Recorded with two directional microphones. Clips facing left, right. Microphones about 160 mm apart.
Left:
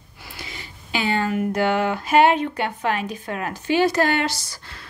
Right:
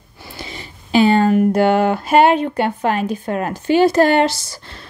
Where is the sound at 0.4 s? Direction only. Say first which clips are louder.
Right 6 dB; 35° right (ahead or behind).